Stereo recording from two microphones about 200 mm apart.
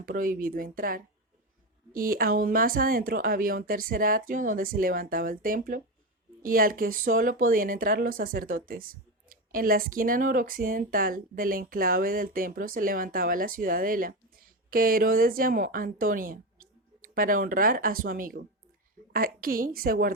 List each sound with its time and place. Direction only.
0.0 s speech: 45° right (ahead or behind)